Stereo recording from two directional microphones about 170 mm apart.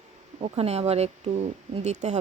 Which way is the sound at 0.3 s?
35° right (ahead or behind).